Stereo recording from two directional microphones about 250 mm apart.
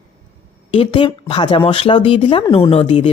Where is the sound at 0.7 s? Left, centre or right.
Centre.